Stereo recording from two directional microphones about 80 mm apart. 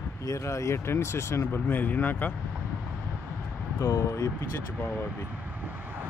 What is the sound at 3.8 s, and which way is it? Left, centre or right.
Speech, left.